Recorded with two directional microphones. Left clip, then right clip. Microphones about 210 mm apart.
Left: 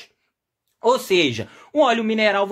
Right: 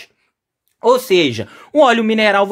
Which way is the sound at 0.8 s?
30° right (ahead or behind).